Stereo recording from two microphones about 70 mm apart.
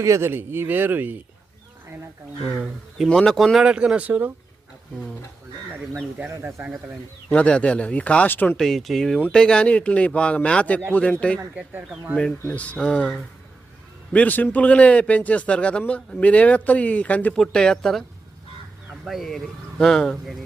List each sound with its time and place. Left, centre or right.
0.0 s speech: right
0.3 s speech: right
3.1 s a man's voice: centre
3.6 s speech: centre
7.3 s a man's voice: centre
8.5 s a man's voice: centre
12.5 s a man's voice: centre
14.1 s a man's voice: left
17.3 s a man's voice: centre
19.0 s speech: centre